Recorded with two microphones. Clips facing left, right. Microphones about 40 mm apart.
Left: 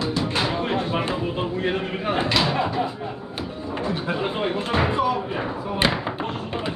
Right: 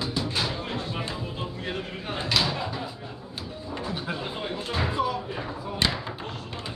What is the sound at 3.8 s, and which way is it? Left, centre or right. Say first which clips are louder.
Speech: left 8 dB; left.